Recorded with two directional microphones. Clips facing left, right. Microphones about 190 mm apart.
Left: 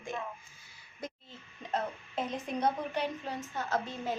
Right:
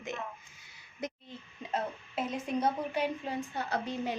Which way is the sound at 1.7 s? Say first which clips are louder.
Even; 10° right (ahead or behind).